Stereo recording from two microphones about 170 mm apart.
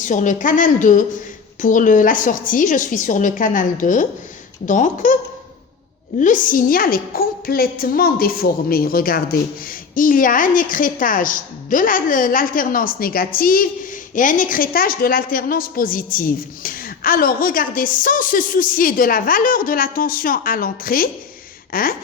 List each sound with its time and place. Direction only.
0.0 s a woman's voice: 50° left (ahead or behind)
6.1 s a woman's voice: 50° left (ahead or behind)